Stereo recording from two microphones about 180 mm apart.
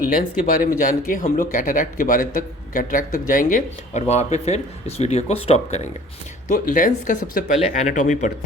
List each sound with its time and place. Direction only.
0.1 s speech: 55° left (ahead or behind)